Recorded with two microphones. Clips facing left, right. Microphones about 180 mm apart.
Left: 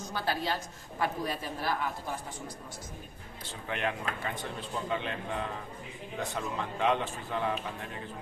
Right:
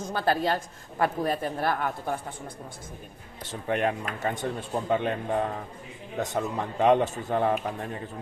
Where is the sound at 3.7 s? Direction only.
45° right (ahead or behind).